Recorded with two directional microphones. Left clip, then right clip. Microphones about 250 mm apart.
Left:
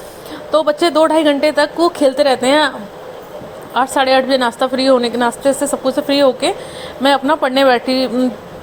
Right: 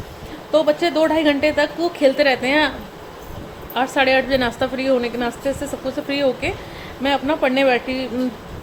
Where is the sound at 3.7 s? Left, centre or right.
Left.